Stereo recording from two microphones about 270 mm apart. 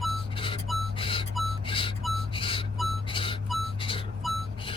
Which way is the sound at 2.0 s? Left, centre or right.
Centre.